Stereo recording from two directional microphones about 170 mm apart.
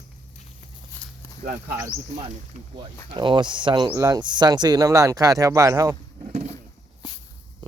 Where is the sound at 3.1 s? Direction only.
30° right (ahead or behind).